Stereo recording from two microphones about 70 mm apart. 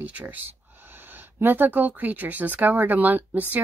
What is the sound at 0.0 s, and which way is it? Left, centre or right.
A woman's voice, right.